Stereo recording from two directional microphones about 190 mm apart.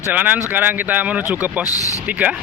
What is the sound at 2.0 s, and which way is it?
Speech, 5° right (ahead or behind).